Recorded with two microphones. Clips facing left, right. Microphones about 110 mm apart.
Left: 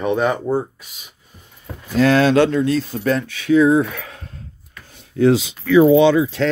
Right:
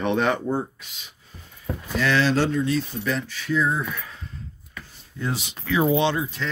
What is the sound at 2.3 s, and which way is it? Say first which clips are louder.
Speech: left 7 dB; 65° left (ahead or behind).